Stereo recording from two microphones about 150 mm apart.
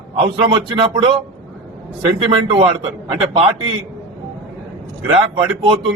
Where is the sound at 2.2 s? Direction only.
35° right (ahead or behind).